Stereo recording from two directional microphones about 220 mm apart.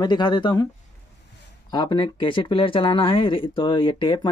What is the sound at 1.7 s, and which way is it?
Speech, 20° left (ahead or behind).